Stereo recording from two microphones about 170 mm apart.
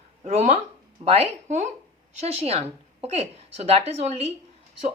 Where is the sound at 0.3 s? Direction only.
40° right (ahead or behind).